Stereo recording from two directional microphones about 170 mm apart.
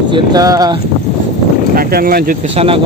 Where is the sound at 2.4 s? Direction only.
35° right (ahead or behind).